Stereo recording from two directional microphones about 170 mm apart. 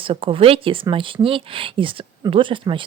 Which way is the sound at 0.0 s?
30° right (ahead or behind).